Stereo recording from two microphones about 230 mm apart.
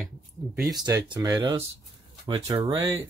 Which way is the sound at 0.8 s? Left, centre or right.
Centre.